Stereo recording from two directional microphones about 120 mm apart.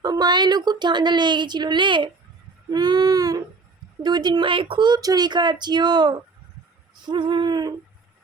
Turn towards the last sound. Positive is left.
turn(degrees=-35)  # may be behind; listen again after turning